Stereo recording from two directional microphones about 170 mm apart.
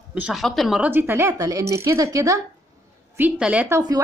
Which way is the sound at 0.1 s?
5° right (ahead or behind).